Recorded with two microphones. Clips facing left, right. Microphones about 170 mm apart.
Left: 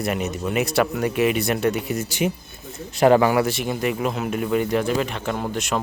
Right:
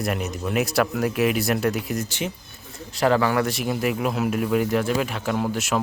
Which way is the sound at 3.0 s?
15° left (ahead or behind).